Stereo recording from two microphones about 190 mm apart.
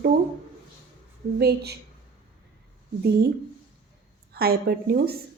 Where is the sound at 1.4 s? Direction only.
60° right (ahead or behind).